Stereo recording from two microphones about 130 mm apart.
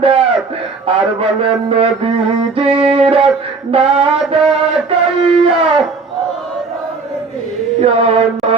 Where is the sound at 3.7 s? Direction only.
45° right (ahead or behind).